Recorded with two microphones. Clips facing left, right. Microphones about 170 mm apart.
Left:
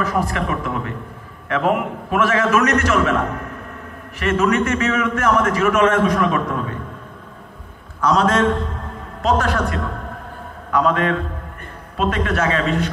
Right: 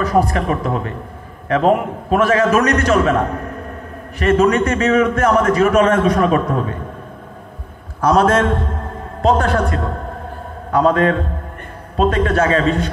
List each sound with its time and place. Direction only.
0.0 s a man's voice: 35° right (ahead or behind)
9.2 s a woman's voice: 30° right (ahead or behind)